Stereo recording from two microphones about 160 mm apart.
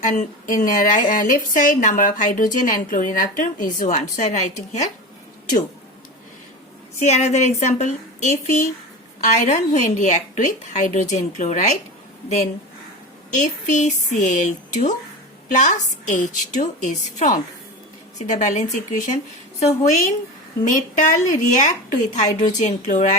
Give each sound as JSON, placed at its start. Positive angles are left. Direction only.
{"t": 0.0, "sound": "a woman's voice", "side_deg": 50}
{"t": 7.0, "sound": "a woman's voice", "side_deg": 45}
{"t": 13.3, "sound": "a woman's voice", "side_deg": 50}